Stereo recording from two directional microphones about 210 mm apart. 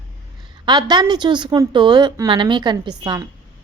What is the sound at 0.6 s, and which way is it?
A woman's voice, 20° right (ahead or behind).